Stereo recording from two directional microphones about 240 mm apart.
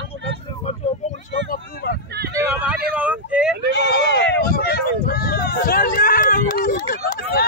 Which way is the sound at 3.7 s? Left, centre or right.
Left.